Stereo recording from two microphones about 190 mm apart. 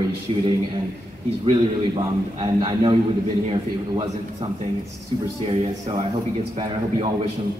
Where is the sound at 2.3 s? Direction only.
25° right (ahead or behind).